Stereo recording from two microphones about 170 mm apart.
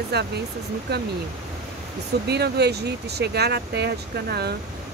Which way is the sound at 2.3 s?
75° right (ahead or behind).